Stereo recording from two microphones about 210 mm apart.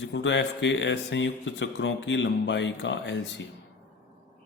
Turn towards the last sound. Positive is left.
turn(degrees=60)  # may be behind; listen again after turning